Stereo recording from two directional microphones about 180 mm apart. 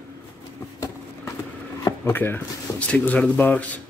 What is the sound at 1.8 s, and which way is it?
Speech, 15° left (ahead or behind).